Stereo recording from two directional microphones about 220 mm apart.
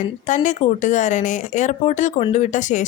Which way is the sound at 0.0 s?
35° left (ahead or behind).